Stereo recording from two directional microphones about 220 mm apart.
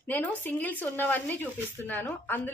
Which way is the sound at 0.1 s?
5° left (ahead or behind).